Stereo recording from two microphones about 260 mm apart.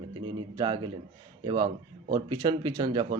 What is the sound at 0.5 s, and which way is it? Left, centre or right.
Speech, centre.